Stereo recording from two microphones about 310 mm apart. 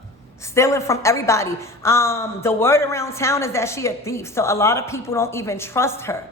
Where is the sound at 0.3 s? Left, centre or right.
Centre.